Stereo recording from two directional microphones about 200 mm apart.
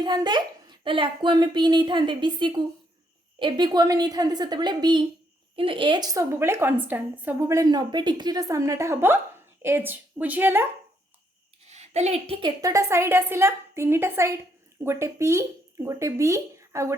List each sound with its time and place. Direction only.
0.0 s a child's voice: 20° right (ahead or behind)
11.6 s a woman's voice: 35° right (ahead or behind); by 16.9 s 15° right (ahead or behind)